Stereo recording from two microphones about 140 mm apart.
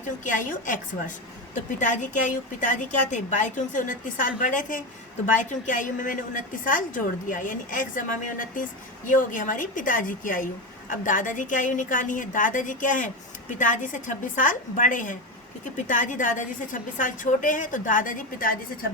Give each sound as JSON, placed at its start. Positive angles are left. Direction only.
{"t": 0.3, "sound": "a woman's voice", "side_deg": 65}